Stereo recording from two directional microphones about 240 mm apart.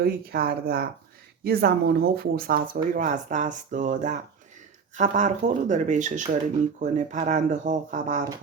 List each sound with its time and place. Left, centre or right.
0.0 s speech: right